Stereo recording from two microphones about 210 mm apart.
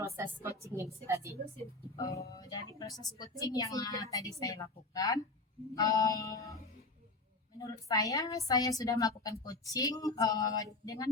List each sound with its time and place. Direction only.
0.0 s a woman's voice: 15° right (ahead or behind)
2.0 s a woman's voice: 15° left (ahead or behind)
7.9 s a woman's voice: 15° left (ahead or behind)